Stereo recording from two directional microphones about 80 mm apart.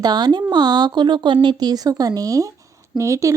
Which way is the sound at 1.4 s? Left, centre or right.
Right.